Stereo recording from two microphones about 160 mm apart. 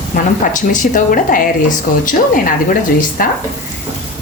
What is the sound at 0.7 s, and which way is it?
Speech, 55° left (ahead or behind).